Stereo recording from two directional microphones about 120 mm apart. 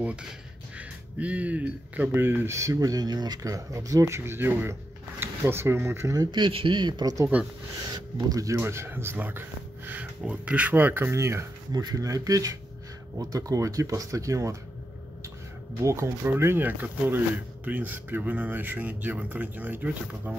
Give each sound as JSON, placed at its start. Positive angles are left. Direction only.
{"t": 0.7, "sound": "speech", "side_deg": -10}
{"t": 6.3, "sound": "speech", "side_deg": -45}
{"t": 15.8, "sound": "speech", "side_deg": -25}